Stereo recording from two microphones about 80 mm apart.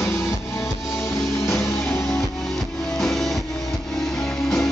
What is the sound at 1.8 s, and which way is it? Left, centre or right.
Music, centre.